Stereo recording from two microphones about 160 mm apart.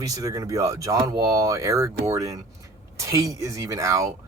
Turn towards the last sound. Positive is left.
turn(degrees=-20)  # may be behind; listen again after turning